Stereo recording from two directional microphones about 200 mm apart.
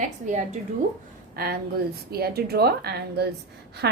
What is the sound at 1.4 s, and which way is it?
A woman's voice, 50° right (ahead or behind).